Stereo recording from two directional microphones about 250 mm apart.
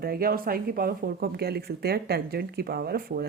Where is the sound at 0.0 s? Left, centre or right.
Right.